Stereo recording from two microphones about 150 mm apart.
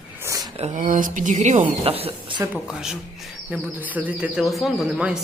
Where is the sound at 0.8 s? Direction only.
65° right (ahead or behind); by 2.4 s 35° right (ahead or behind).